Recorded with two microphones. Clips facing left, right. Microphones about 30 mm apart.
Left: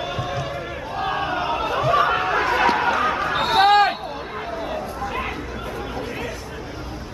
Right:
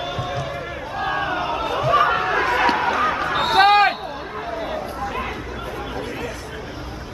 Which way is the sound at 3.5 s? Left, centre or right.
Centre.